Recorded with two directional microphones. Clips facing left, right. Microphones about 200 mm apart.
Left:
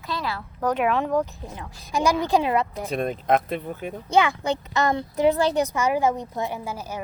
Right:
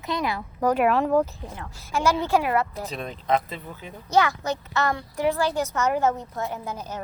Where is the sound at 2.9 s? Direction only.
50° left (ahead or behind).